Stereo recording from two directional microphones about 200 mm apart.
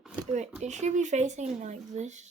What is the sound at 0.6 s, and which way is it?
Speech, 35° right (ahead or behind).